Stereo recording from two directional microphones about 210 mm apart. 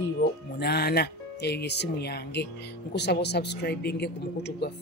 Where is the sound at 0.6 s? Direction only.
50° left (ahead or behind).